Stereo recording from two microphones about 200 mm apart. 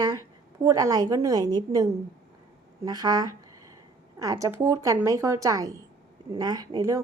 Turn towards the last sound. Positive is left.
turn(degrees=-15)  # may be behind; listen again after turning